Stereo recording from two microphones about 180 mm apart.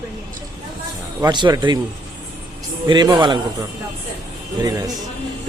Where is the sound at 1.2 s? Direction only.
25° right (ahead or behind).